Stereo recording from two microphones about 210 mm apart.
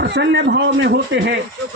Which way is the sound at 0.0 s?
55° right (ahead or behind).